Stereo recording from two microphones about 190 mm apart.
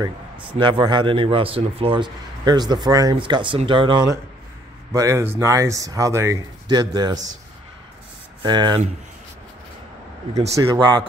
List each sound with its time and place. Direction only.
0.6 s a man's voice: 25° right (ahead or behind)
8.4 s speech: 25° right (ahead or behind)
10.5 s a man's voice: 20° right (ahead or behind)